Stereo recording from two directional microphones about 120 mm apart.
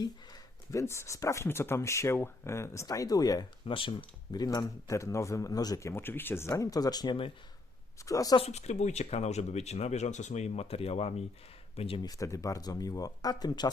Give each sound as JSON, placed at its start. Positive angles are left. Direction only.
{"t": 0.7, "sound": "speech", "side_deg": 25}
{"t": 3.7, "sound": "speech", "side_deg": 45}
{"t": 8.4, "sound": "speech", "side_deg": 60}
{"t": 12.0, "sound": "speech", "side_deg": 30}